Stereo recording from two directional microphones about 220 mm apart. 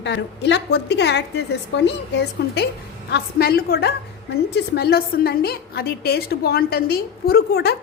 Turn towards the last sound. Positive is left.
turn(degrees=45)  # may be behind; listen again after turning